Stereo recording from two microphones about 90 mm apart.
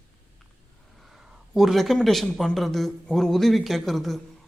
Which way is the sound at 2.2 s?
Centre (ahead or behind).